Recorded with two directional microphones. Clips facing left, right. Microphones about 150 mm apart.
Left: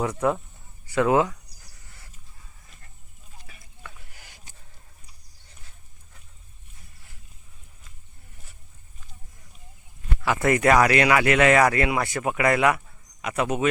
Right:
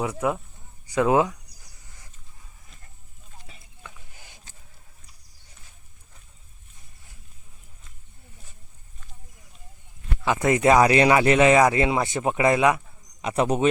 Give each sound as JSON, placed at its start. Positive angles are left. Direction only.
{"t": 0.0, "sound": "speech", "side_deg": -10}
{"t": 3.4, "sound": "a sound", "side_deg": -25}
{"t": 10.2, "sound": "speech", "side_deg": -15}
{"t": 13.2, "sound": "speech", "side_deg": -30}